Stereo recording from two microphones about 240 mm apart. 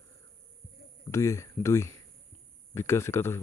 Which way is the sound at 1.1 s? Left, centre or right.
Centre.